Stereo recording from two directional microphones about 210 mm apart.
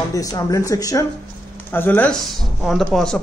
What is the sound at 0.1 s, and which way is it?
A man's voice, 15° left (ahead or behind).